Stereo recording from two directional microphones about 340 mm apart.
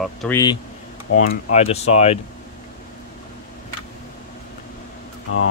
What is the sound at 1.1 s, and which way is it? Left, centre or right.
Speech, left.